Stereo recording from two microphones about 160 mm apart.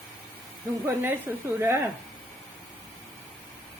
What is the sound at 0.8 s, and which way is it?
Speech, 15° right (ahead or behind).